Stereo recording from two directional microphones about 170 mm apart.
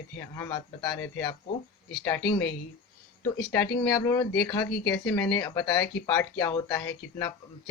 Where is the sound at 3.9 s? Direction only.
20° left (ahead or behind).